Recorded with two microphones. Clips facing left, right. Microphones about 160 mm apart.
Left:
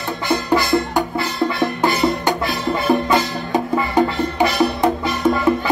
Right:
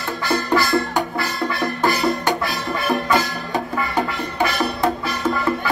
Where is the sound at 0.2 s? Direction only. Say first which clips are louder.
Left 1 dB; 20° left (ahead or behind).